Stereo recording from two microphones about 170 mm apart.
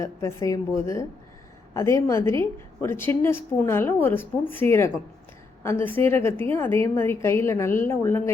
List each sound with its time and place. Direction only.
0.0 s a woman's voice: 15° left (ahead or behind)